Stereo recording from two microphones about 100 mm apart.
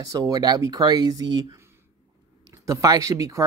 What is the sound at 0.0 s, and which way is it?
Speech, 35° right (ahead or behind).